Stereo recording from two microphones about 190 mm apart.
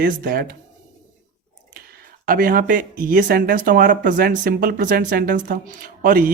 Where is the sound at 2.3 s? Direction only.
45° right (ahead or behind).